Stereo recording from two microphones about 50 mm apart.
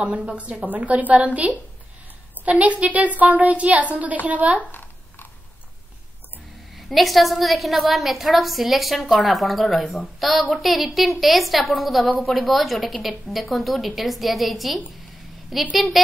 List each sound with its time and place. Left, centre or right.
0.0 s a woman's voice: right
4.6 s a sound: left
6.7 s a woman's voice: centre